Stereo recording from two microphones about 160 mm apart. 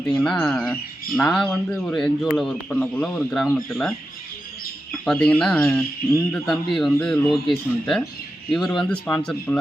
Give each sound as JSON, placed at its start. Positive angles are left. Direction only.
{"t": 0.0, "sound": "speech", "side_deg": 5}
{"t": 6.3, "sound": "speech", "side_deg": 0}